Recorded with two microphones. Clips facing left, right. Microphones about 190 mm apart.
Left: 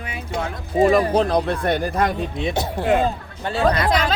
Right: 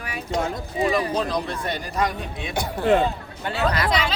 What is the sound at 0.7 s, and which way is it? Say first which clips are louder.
Speech: left 7 dB; 45° left (ahead or behind).